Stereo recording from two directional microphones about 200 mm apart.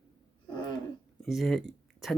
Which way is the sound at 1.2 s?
Centre (ahead or behind).